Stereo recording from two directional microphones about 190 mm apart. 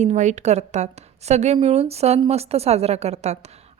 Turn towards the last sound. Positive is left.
turn(degrees=-35)  # may be behind; listen again after turning